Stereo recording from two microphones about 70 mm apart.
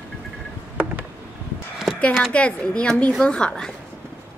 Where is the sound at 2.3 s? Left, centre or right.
Centre.